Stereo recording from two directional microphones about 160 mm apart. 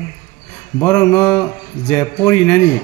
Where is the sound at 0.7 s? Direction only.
10° left (ahead or behind).